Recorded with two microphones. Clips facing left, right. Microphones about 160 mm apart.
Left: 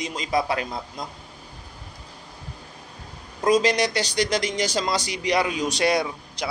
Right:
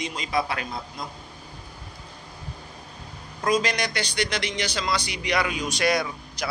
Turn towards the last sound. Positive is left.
turn(degrees=25)  # may be behind; listen again after turning